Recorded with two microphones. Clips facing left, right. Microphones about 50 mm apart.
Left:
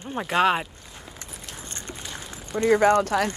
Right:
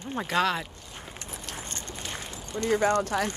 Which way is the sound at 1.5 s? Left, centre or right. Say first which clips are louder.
Right 2 dB; right.